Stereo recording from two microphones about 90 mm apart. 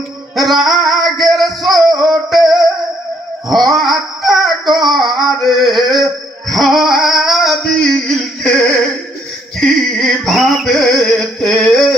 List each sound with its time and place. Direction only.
0.3 s music: centre (ahead or behind)